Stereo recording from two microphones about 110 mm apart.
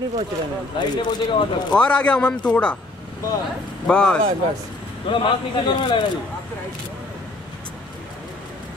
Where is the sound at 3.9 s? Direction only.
5° left (ahead or behind).